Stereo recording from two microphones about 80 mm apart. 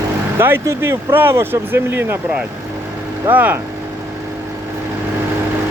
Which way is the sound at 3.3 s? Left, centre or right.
Right.